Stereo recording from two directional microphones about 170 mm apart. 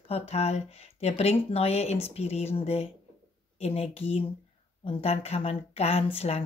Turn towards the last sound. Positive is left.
turn(degrees=35)  # may be behind; listen again after turning